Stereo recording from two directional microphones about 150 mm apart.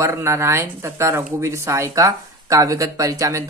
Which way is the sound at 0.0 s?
20° right (ahead or behind).